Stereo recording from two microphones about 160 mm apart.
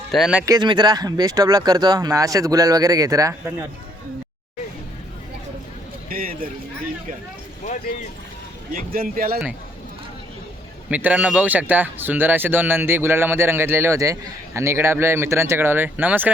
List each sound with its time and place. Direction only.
0.1 s speech: 5° right (ahead or behind)
0.4 s speech: 25° right (ahead or behind)
6.1 s a sound: 65° right (ahead or behind)
8.7 s speech: 65° right (ahead or behind)
10.8 s a man's voice: 10° right (ahead or behind)